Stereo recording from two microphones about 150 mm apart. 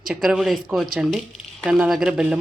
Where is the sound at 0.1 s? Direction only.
5° right (ahead or behind).